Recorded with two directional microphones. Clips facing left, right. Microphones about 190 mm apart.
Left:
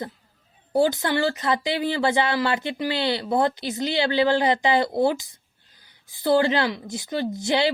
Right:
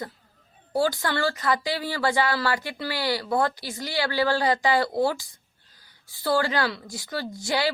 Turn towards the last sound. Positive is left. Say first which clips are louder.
# left 4 dB
turn(degrees=20)  # may be behind; listen again after turning